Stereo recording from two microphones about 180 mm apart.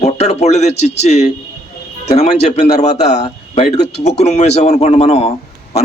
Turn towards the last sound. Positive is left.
turn(degrees=35)  # may be behind; listen again after turning